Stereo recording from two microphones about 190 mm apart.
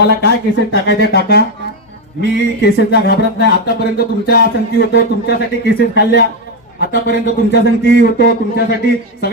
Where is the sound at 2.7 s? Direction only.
65° left (ahead or behind).